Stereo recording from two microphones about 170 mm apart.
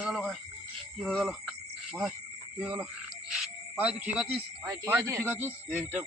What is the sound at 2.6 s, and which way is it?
Speech, 5° right (ahead or behind).